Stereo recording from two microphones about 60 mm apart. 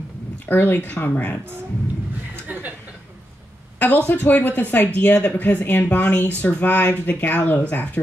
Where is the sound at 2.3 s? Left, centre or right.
Right.